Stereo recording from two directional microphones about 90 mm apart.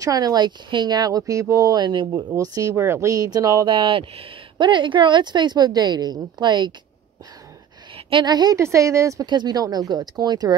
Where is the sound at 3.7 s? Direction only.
70° right (ahead or behind).